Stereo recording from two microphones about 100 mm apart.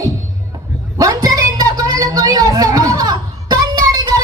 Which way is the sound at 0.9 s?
40° right (ahead or behind).